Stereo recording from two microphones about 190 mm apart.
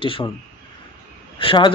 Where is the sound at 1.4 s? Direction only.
25° left (ahead or behind).